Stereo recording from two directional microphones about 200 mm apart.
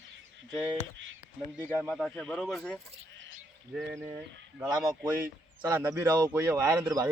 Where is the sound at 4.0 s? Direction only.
15° right (ahead or behind).